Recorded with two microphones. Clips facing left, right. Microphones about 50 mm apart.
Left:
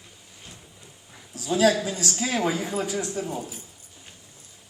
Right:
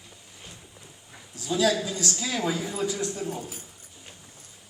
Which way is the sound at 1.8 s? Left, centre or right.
Left.